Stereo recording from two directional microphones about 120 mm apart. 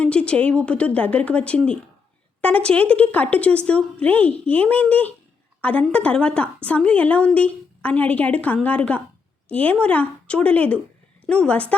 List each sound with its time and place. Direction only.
0.0 s speech: 10° left (ahead or behind)